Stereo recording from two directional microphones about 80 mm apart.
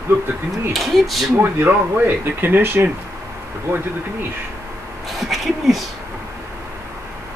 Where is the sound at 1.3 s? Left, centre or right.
Right.